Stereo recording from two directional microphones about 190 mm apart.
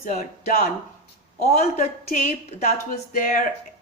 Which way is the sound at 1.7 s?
40° left (ahead or behind).